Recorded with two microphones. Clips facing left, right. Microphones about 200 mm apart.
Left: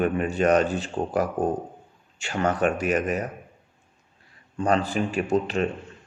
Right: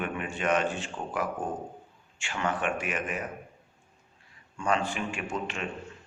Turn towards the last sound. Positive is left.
turn(degrees=35)  # may be behind; listen again after turning